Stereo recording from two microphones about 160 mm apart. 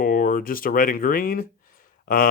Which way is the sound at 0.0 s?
60° left (ahead or behind).